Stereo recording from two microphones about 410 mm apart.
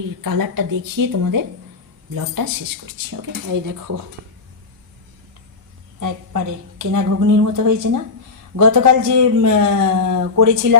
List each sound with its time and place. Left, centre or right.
0.2 s a man's voice: right
3.2 s a man's voice: right
6.0 s a man's voice: right